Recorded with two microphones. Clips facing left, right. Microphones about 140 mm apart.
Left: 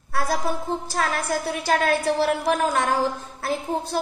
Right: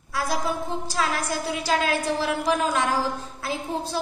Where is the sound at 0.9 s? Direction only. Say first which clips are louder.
Left 1 dB; 50° left (ahead or behind).